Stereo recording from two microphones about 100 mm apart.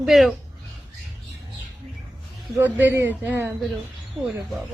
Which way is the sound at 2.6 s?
20° right (ahead or behind).